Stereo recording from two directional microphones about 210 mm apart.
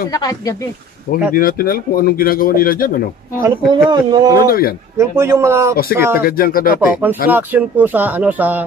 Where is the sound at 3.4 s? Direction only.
20° right (ahead or behind).